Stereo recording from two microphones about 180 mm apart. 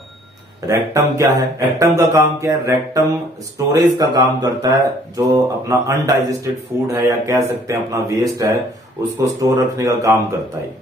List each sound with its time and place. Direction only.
0.7 s mantra: 20° right (ahead or behind)
3.5 s speech: 20° right (ahead or behind)